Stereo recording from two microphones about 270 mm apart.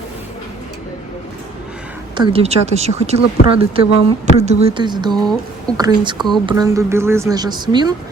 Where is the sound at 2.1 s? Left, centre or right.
Centre.